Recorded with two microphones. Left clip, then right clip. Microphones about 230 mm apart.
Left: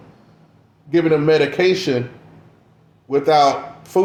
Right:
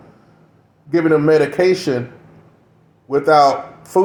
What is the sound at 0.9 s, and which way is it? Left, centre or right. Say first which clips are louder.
A man's voice: right 2 dB; right.